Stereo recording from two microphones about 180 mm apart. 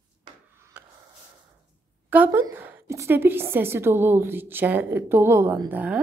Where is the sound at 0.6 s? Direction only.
15° right (ahead or behind).